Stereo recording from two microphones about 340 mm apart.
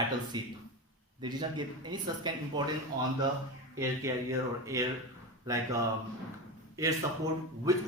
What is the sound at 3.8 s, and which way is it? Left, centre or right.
Speech, centre.